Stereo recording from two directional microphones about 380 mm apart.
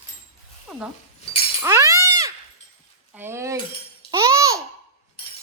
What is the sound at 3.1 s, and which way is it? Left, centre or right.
Speech, centre.